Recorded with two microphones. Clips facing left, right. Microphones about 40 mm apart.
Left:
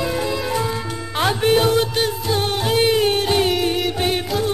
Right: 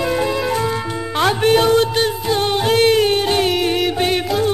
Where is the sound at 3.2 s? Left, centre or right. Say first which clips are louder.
Right 1 dB; centre.